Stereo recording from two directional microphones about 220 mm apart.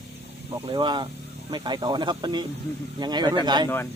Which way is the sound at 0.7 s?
20° right (ahead or behind).